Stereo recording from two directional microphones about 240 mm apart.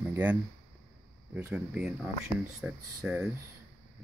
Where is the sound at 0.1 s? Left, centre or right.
Centre.